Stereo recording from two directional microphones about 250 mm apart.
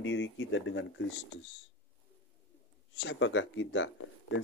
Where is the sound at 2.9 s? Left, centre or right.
Left.